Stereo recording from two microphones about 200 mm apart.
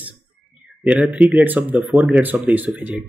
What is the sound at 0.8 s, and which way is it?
Speech, 5° right (ahead or behind).